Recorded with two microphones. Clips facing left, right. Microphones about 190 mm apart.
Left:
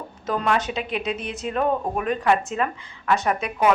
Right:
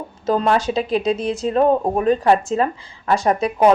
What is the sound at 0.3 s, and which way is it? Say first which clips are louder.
Speech: right 6 dB; 30° right (ahead or behind).